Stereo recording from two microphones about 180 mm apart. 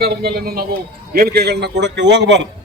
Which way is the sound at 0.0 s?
60° right (ahead or behind).